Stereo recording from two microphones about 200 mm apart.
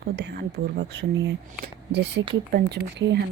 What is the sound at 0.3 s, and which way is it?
Speech, 55° right (ahead or behind).